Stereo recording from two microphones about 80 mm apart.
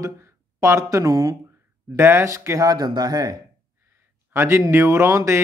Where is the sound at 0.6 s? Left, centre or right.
Right.